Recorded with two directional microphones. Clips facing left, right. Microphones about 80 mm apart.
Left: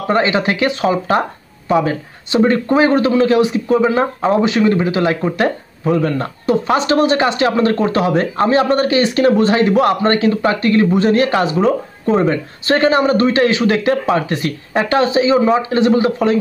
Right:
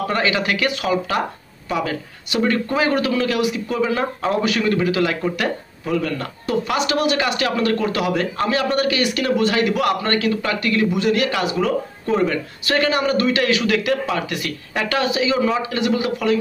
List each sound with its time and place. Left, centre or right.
0.1 s speech: left